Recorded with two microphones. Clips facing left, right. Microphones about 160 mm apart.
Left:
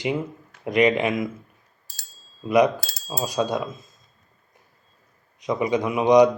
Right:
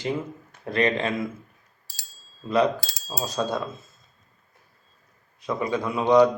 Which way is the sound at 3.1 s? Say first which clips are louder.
Left 3 dB; 10° left (ahead or behind).